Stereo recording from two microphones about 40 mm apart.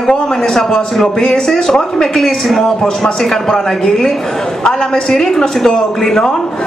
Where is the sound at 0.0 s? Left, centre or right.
Centre.